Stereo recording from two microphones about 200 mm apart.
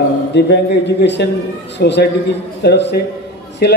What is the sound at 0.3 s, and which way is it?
A man's voice, 60° left (ahead or behind).